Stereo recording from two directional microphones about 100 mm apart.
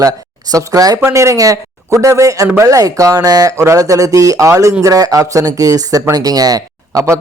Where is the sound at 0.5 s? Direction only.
35° right (ahead or behind).